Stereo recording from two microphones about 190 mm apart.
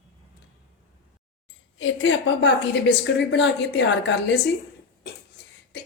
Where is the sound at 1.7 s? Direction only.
85° left.